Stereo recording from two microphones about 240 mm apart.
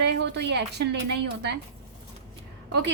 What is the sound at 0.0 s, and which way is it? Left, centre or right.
Speech, right.